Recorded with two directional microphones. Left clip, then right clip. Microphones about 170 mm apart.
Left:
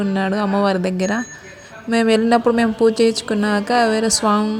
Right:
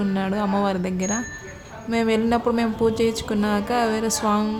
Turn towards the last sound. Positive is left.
turn(degrees=30)  # may be behind; listen again after turning